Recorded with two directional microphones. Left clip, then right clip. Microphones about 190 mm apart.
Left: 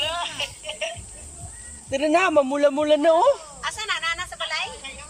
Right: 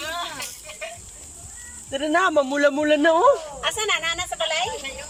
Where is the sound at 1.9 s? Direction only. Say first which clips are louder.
Left 1 dB; 15° left (ahead or behind).